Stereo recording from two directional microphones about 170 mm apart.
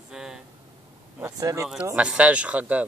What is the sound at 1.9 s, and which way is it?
Speech, 5° right (ahead or behind).